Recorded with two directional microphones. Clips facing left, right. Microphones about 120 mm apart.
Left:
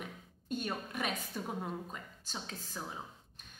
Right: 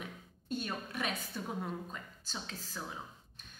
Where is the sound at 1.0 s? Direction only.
10° left (ahead or behind).